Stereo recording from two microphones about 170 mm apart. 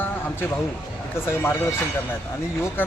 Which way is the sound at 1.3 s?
15° left (ahead or behind).